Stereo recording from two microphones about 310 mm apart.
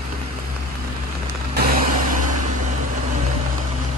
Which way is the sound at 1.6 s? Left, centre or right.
Right.